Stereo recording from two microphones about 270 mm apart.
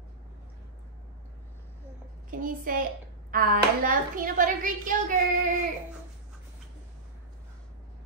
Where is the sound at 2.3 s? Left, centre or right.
Right.